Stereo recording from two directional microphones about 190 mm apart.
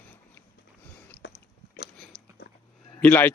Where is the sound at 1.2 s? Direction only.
65° left (ahead or behind).